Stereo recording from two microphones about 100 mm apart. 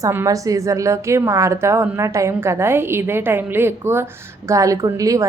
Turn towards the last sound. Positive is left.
turn(degrees=-30)  # may be behind; listen again after turning